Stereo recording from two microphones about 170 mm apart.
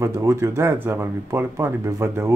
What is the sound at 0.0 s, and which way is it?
Speech, 15° right (ahead or behind).